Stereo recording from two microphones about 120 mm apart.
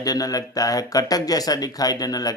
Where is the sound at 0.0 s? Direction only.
30° left (ahead or behind).